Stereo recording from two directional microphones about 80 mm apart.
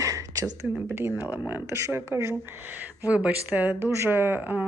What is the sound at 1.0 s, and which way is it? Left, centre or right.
Speech, right.